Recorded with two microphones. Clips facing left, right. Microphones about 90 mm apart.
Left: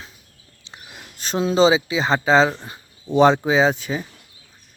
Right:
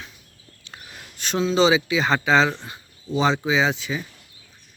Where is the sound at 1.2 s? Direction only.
35° left (ahead or behind).